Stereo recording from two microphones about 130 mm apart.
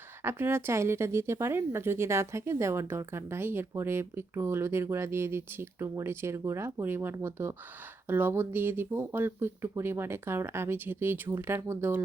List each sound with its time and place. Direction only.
0.2 s speech: 15° right (ahead or behind)